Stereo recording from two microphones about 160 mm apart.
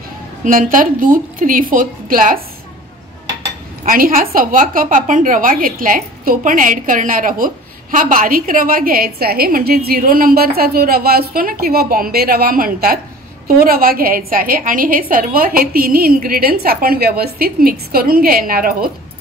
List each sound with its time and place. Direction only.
0.4 s a woman's voice: 60° right (ahead or behind)
3.8 s a woman's voice: 60° right (ahead or behind)